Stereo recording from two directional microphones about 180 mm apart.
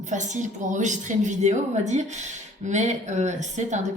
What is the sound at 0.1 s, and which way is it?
A woman's voice, 45° right (ahead or behind).